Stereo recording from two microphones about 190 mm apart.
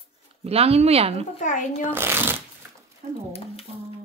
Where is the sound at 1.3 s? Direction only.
40° left (ahead or behind).